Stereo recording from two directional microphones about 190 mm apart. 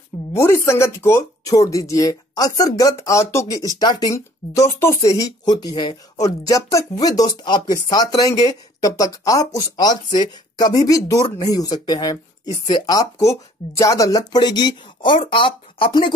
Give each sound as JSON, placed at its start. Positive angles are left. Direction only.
{"t": 0.3, "sound": "speech", "side_deg": 15}